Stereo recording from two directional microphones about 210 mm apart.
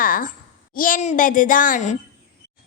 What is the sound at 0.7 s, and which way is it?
A woman's voice, 40° left (ahead or behind).